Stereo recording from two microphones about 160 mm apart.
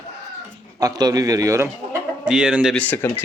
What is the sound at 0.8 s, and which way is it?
Speech, 25° right (ahead or behind).